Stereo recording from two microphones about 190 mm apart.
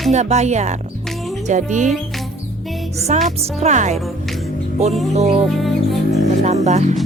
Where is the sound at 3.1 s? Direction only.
35° right (ahead or behind).